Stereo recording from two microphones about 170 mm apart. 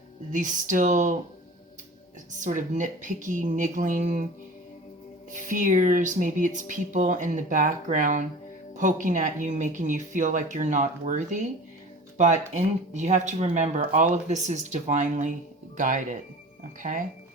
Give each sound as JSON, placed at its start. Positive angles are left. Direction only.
{"t": 0.3, "sound": "speech", "side_deg": -50}
{"t": 2.3, "sound": "speech", "side_deg": -50}
{"t": 5.5, "sound": "speech", "side_deg": -50}